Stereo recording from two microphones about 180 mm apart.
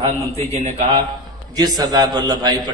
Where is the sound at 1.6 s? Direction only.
20° right (ahead or behind).